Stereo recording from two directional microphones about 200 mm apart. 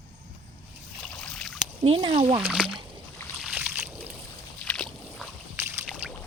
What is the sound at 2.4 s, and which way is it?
Speech, 5° right (ahead or behind).